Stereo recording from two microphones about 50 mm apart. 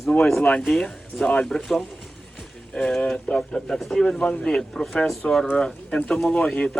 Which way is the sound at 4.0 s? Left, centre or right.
Centre.